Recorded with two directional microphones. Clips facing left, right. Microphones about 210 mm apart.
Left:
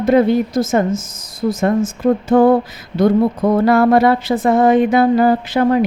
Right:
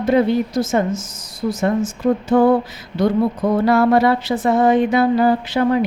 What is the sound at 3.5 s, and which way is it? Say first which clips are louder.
Speech: left 2 dB; 50° left (ahead or behind).